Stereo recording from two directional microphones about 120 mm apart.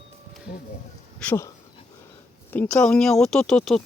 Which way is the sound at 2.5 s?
10° left (ahead or behind).